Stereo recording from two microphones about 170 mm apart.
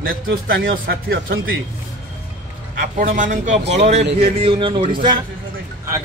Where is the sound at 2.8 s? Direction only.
55° right (ahead or behind); by 4.9 s 30° right (ahead or behind).